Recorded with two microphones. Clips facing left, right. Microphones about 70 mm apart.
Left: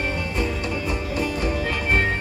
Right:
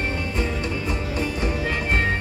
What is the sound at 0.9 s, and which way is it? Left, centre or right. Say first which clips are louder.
Music: left 1 dB; right.